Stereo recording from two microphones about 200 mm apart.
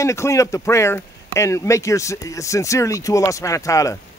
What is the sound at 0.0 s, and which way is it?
Speech, 15° left (ahead or behind).